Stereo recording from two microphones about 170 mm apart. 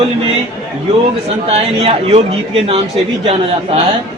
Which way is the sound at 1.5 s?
35° right (ahead or behind).